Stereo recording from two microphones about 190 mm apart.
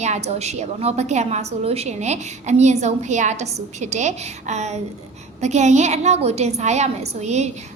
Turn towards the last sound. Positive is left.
turn(degrees=-35)  # may be behind; listen again after turning